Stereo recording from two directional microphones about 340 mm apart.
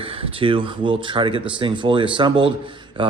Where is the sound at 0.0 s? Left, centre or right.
Centre.